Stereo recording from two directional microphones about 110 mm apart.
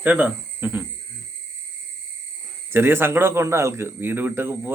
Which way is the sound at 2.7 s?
20° right (ahead or behind).